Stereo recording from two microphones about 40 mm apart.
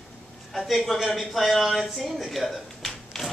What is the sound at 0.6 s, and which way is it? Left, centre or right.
Speech, centre.